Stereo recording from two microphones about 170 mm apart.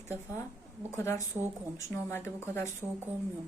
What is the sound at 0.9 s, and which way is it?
Speech, 15° left (ahead or behind).